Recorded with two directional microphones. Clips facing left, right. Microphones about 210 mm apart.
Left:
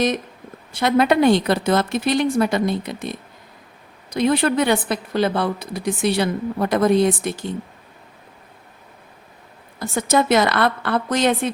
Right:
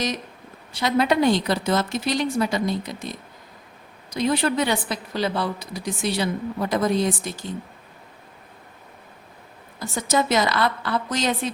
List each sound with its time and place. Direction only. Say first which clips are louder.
0.7 s a woman's voice: left 4 dB; 55° left (ahead or behind)
9.8 s a woman's voice: left 4 dB; 60° left (ahead or behind)